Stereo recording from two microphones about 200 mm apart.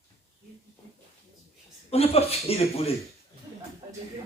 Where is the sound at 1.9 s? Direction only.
30° left (ahead or behind).